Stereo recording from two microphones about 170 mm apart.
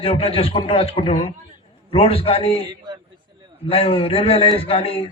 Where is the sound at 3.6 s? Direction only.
35° left (ahead or behind).